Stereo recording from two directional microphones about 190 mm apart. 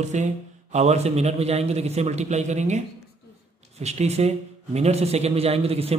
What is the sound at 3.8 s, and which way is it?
A man's voice, 35° right (ahead or behind).